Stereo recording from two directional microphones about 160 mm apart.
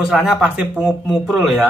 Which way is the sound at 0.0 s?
5° right (ahead or behind).